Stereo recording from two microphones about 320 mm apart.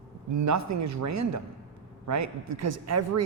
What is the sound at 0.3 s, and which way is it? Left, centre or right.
A woman's voice, right.